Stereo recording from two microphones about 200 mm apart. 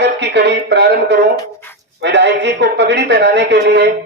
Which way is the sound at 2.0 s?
60° right (ahead or behind).